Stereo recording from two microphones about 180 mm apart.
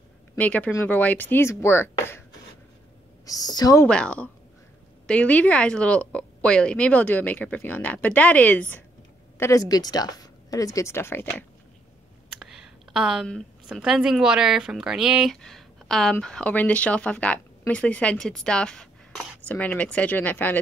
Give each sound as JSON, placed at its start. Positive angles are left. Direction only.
{"t": 0.4, "sound": "a woman's voice", "side_deg": 10}
{"t": 3.3, "sound": "speech", "side_deg": 20}
{"t": 3.8, "sound": "a woman's voice", "side_deg": 5}
{"t": 12.4, "sound": "a woman's voice", "side_deg": 0}